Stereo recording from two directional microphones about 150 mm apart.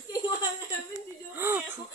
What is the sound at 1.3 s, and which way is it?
Speech, 15° right (ahead or behind).